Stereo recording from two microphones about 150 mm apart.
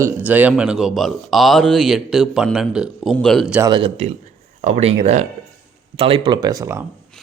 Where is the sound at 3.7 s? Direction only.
35° right (ahead or behind).